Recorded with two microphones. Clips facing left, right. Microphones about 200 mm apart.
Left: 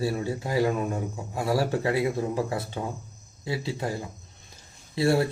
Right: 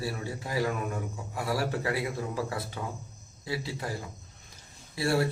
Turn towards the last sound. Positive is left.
turn(degrees=25)  # may be behind; listen again after turning